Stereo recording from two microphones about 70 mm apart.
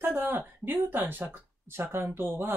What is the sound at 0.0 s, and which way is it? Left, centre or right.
Speech, right.